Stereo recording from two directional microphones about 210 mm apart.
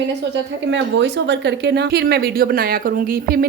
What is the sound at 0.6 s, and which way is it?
A woman's voice, 55° right (ahead or behind).